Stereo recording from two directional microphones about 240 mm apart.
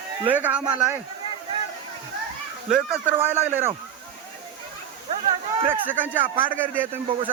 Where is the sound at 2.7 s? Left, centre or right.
Centre.